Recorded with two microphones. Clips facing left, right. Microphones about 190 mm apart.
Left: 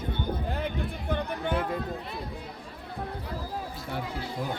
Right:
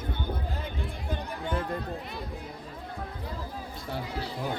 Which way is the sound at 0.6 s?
60° left (ahead or behind).